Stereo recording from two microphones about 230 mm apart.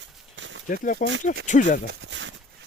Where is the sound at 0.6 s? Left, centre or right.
Left.